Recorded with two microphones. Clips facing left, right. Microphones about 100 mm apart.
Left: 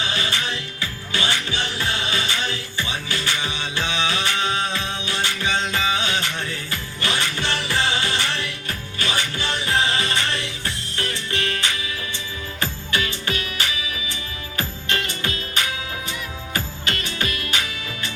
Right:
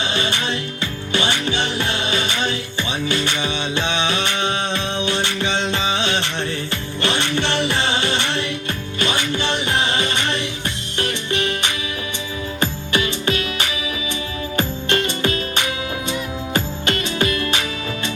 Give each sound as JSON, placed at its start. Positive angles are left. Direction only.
{"t": 0.0, "sound": "music", "side_deg": -25}